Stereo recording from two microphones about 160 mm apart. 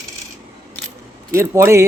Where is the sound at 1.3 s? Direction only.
15° right (ahead or behind).